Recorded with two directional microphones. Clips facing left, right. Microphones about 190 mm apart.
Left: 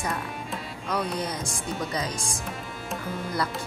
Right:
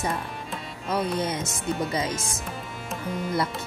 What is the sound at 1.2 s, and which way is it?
Speech, 25° right (ahead or behind).